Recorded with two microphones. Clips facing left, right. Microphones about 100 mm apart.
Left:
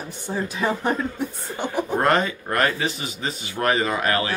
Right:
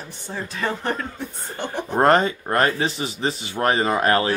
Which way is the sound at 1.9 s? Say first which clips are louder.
Right 5 dB; 30° right (ahead or behind).